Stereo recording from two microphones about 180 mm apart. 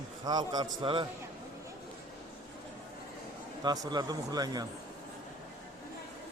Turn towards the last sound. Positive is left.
turn(degrees=-20)  # may be behind; listen again after turning